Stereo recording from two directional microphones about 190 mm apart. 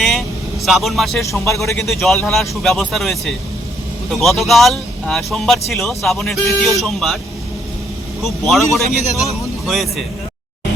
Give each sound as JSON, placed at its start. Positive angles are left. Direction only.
{"t": 0.0, "sound": "vehicle", "side_deg": 0}
{"t": 1.2, "sound": "speech", "side_deg": 15}
{"t": 1.6, "sound": "speech", "side_deg": 5}
{"t": 8.2, "sound": "speech", "side_deg": 0}